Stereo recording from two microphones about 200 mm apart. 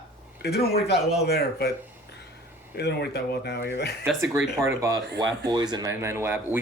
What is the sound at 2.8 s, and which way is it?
Speech, 55° left (ahead or behind).